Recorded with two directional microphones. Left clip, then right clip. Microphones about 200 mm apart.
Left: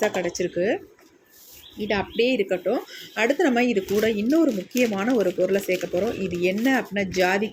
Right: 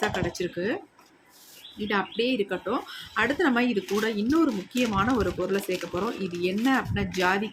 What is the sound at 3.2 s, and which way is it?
Speech, 5° left (ahead or behind).